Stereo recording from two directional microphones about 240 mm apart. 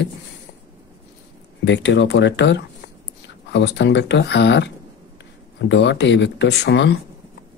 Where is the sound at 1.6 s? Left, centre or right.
Left.